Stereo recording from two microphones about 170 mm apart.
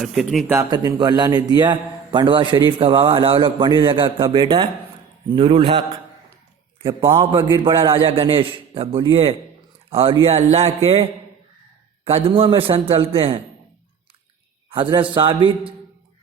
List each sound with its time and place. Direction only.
0.0 s speech: centre (ahead or behind)
0.4 s a man's voice: 15° right (ahead or behind)
7.0 s a man's voice: 15° right (ahead or behind)
7.8 s a man's voice: 35° right (ahead or behind)
12.1 s a man's voice: 35° right (ahead or behind)
14.7 s a man's voice: 30° right (ahead or behind)